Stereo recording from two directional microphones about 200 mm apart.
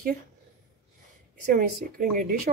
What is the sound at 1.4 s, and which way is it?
Speech, 45° right (ahead or behind).